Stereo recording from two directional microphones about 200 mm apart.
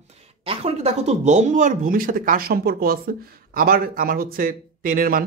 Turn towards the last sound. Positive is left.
turn(degrees=-45)  # may be behind; listen again after turning